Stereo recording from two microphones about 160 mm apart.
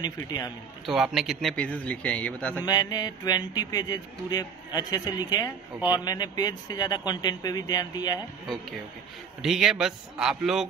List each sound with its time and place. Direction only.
0.0 s speech: 25° left (ahead or behind)
0.8 s speech: 5° right (ahead or behind)
2.6 s speech: 25° left (ahead or behind)
9.4 s a man's voice: centre (ahead or behind)